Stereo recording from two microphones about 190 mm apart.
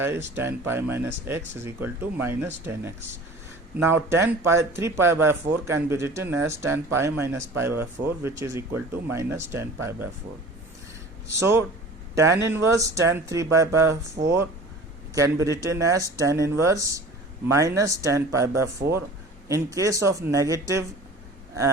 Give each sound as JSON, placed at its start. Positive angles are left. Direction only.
{"t": 0.0, "sound": "speech", "side_deg": -10}
{"t": 11.3, "sound": "speech", "side_deg": -15}